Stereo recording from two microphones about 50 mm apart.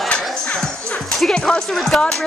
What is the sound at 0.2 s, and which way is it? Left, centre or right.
Music, centre.